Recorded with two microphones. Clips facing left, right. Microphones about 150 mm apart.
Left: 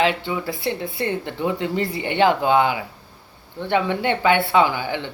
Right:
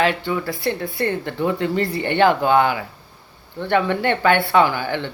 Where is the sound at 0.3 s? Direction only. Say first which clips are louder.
Right 2 dB; 15° left (ahead or behind).